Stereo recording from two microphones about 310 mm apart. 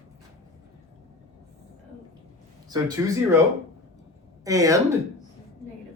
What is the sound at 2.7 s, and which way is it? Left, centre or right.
Speech, centre.